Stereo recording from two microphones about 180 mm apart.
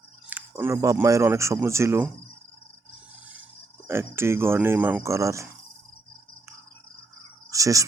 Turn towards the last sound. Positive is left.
turn(degrees=-20)  # may be behind; listen again after turning